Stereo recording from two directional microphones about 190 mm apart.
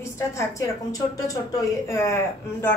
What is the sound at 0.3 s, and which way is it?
A woman's voice, 15° left (ahead or behind).